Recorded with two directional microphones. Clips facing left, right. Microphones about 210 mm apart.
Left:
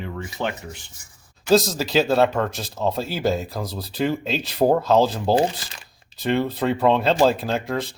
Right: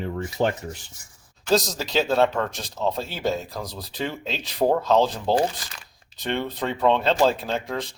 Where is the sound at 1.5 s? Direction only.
5° left (ahead or behind).